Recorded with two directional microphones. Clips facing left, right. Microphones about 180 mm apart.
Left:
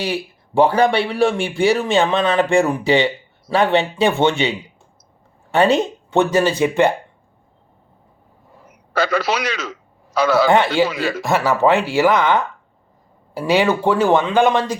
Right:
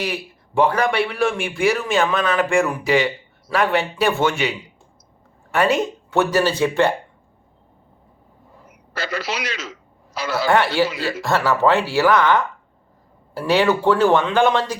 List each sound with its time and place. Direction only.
0.0 s a man's voice: 30° left (ahead or behind)
8.9 s a man's voice: 60° left (ahead or behind)
10.5 s speech: 20° left (ahead or behind)